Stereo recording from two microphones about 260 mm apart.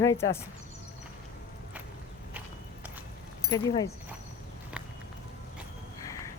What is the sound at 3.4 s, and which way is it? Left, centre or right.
Speech, centre.